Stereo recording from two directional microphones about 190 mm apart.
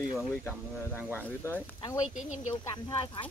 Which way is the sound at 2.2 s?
40° left (ahead or behind).